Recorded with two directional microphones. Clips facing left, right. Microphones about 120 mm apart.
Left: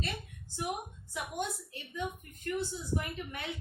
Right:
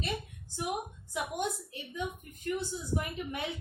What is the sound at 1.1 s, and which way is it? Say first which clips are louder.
Speech: right 3 dB; 15° right (ahead or behind).